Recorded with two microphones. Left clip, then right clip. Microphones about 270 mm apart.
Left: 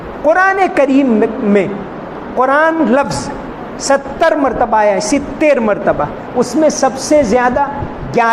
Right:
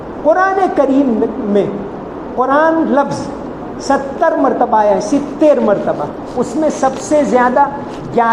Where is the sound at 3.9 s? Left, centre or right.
Left.